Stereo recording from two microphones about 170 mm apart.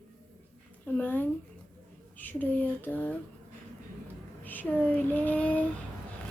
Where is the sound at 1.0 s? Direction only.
10° left (ahead or behind).